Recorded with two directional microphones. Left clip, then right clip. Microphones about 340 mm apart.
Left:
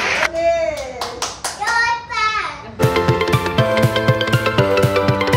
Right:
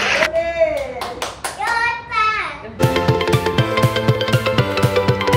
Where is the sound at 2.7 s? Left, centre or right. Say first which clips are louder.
Left 1 dB; centre.